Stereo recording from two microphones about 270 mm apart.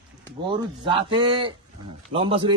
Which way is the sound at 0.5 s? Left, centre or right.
Centre.